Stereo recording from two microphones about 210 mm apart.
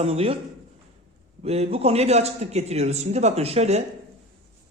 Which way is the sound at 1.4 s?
30° right (ahead or behind).